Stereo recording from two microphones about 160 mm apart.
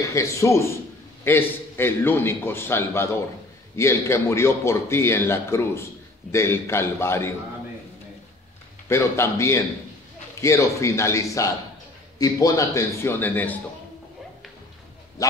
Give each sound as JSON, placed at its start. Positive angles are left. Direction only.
{"t": 0.0, "sound": "a man's voice", "side_deg": 20}
{"t": 8.8, "sound": "a man's voice", "side_deg": 15}